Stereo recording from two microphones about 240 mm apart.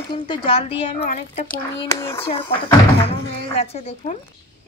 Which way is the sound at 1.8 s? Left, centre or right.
Centre.